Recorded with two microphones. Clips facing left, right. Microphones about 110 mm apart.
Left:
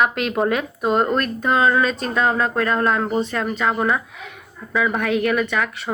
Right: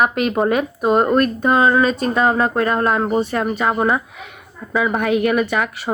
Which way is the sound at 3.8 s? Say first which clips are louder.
Right 3 dB; 25° right (ahead or behind).